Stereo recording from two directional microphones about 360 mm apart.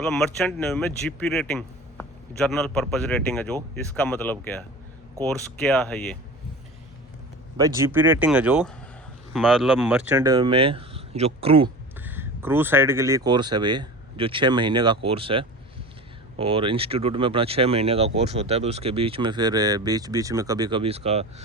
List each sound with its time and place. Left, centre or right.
0.0 s speech: centre
7.5 s speech: centre